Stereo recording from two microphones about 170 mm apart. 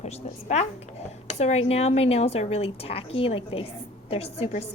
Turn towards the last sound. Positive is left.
turn(degrees=35)  # may be behind; listen again after turning